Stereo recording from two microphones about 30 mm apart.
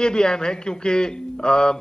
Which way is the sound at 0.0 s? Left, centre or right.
Left.